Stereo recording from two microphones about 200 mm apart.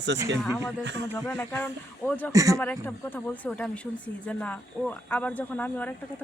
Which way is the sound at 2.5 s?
5° left (ahead or behind).